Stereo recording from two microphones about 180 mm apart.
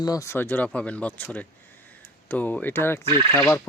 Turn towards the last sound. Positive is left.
turn(degrees=15)  # may be behind; listen again after turning